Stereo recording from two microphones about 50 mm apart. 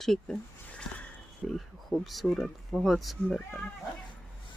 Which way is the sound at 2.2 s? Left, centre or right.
Centre.